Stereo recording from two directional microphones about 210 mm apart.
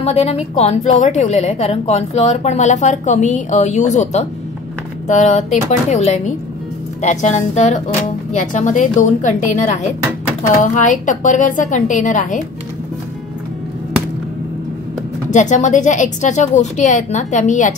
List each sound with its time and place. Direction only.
0.0 s a woman's voice: 30° left (ahead or behind)
15.3 s a woman's voice: 35° left (ahead or behind)